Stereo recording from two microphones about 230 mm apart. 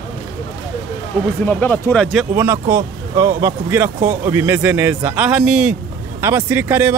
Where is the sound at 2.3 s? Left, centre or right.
Centre.